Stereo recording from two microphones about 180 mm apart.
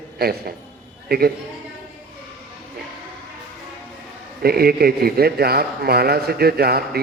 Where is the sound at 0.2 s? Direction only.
60° right (ahead or behind).